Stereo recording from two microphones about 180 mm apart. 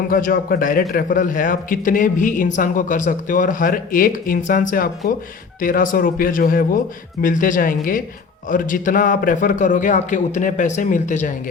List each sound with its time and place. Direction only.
0.1 s a man's voice: 50° left (ahead or behind)